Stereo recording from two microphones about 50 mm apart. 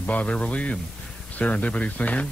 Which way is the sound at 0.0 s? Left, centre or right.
Left.